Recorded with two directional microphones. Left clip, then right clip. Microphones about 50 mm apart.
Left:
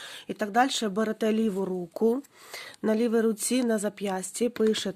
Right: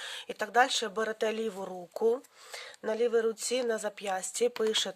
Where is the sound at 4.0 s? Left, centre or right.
Centre.